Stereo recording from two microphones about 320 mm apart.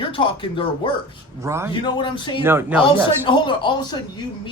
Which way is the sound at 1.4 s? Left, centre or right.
Centre.